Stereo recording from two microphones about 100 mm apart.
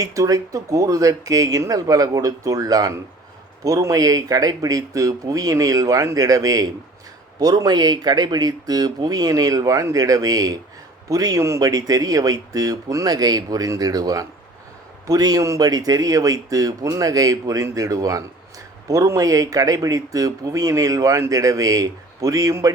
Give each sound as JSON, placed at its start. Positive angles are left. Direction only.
{"t": 0.0, "sound": "speech", "side_deg": -35}